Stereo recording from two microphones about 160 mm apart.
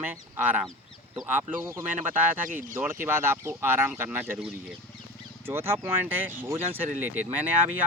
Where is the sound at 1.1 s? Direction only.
15° right (ahead or behind).